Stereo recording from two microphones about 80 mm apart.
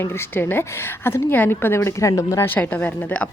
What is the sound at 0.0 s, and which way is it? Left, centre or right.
A woman's voice, left.